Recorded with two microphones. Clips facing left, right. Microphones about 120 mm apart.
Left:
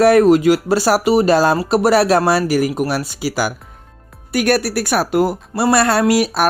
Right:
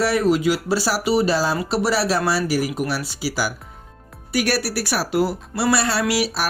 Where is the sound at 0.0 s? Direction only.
55° left (ahead or behind).